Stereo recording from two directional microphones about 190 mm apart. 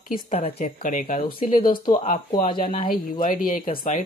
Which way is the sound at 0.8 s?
45° left (ahead or behind).